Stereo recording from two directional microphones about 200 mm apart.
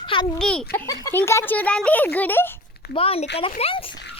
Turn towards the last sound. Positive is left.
turn(degrees=30)  # may be behind; listen again after turning